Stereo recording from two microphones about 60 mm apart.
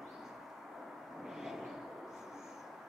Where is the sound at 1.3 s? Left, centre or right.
Centre.